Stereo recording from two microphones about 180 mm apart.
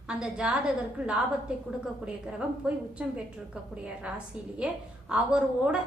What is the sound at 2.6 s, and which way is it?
A woman's voice, 5° right (ahead or behind).